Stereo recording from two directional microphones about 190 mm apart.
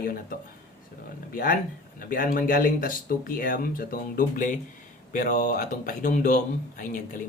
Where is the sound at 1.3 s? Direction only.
50° left (ahead or behind).